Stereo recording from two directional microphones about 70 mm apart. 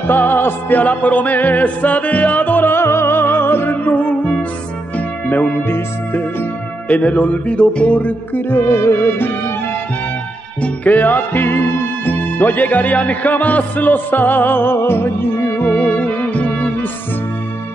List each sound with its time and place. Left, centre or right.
0.1 s music: left
10.6 s music: left